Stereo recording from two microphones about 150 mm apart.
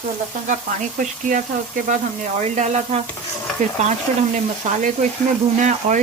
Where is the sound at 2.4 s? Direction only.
50° right (ahead or behind).